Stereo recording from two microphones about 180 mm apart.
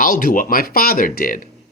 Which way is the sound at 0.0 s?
50° left (ahead or behind).